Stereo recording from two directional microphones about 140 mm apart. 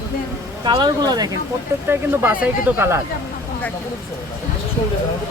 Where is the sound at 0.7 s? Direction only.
30° right (ahead or behind).